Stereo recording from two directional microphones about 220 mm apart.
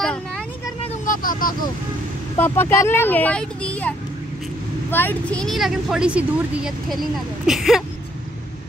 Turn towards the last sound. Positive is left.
turn(degrees=0)  # may be behind; listen again after turning